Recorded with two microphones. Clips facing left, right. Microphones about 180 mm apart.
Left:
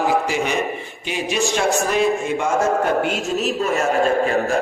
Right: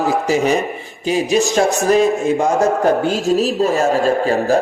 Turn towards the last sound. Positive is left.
turn(degrees=-35)  # may be behind; listen again after turning